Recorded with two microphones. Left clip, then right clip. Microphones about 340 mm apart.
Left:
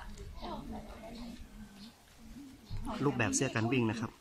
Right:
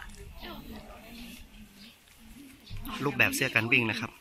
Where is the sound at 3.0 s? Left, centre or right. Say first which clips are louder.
Right 7 dB; centre.